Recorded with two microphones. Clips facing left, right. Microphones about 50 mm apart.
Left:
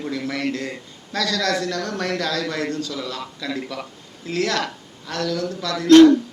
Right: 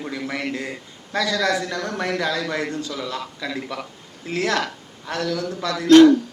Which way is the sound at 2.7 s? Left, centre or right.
Right.